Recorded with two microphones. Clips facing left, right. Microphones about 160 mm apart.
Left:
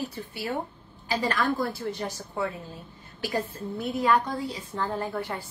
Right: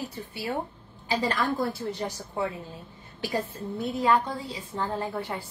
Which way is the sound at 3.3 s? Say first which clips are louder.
Even; 25° right (ahead or behind).